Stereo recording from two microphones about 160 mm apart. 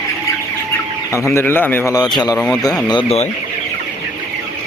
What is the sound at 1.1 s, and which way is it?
Speech, 20° left (ahead or behind).